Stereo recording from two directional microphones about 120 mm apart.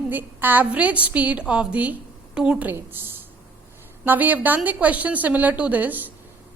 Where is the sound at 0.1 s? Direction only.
15° right (ahead or behind).